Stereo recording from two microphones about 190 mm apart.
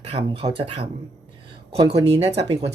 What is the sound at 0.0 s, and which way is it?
Speech, 30° right (ahead or behind).